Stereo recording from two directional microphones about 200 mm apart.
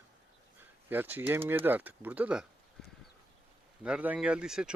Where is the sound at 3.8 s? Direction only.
5° right (ahead or behind).